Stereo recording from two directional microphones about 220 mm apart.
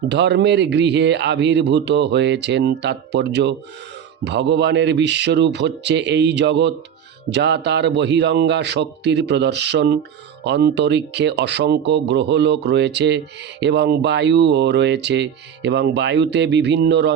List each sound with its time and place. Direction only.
0.1 s speech: 50° right (ahead or behind)